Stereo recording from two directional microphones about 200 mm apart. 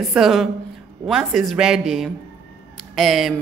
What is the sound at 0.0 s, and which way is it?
A woman's voice, centre (ahead or behind).